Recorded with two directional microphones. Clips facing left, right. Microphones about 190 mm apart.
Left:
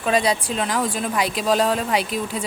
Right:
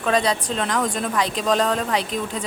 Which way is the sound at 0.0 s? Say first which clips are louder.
Left 1 dB; 10° left (ahead or behind).